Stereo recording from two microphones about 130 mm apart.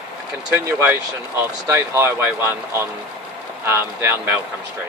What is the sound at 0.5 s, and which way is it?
Speech, 15° right (ahead or behind).